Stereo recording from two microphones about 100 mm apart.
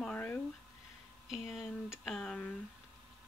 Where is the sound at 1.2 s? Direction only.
5° right (ahead or behind).